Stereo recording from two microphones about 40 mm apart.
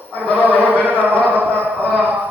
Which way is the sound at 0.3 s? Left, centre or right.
Right.